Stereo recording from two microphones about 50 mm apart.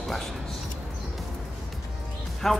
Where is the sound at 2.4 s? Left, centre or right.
Centre.